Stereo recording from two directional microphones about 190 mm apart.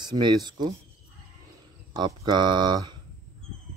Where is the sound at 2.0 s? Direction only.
25° right (ahead or behind).